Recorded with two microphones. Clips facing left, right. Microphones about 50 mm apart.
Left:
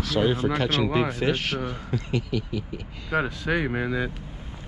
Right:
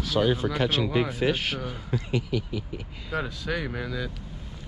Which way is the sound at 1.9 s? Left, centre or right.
Left.